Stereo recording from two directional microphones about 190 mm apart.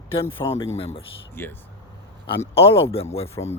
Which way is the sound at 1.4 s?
10° left (ahead or behind).